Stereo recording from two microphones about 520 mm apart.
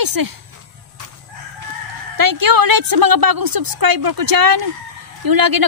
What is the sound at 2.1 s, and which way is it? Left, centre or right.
A woman's voice, right.